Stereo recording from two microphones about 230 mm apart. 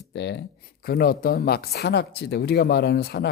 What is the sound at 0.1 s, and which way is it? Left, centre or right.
Speech, left.